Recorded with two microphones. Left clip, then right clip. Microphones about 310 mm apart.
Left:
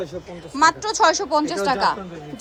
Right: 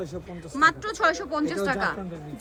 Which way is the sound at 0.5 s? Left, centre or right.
Centre.